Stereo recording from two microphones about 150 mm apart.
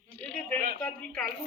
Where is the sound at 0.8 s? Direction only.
10° left (ahead or behind).